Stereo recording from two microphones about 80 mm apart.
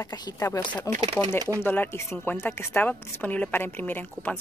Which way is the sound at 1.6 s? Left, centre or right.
Left.